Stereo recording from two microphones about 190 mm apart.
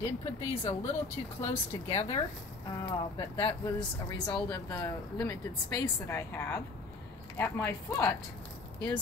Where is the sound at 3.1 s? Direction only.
25° left (ahead or behind).